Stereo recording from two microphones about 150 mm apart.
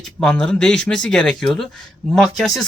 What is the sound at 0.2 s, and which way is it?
Speech, 5° left (ahead or behind).